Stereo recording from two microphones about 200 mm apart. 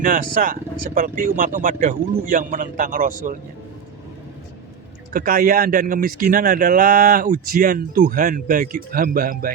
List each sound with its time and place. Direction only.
0.0 s speech: 40° right (ahead or behind)
5.1 s speech: 45° right (ahead or behind)